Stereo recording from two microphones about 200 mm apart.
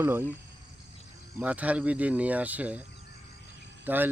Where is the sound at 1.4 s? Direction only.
5° right (ahead or behind).